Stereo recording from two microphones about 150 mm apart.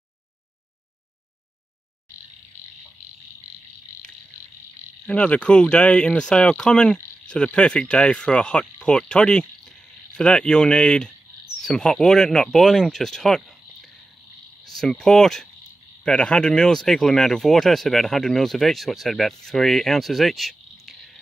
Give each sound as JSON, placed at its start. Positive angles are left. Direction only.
{"t": 5.0, "sound": "speech", "side_deg": 10}
{"t": 14.7, "sound": "speech", "side_deg": 5}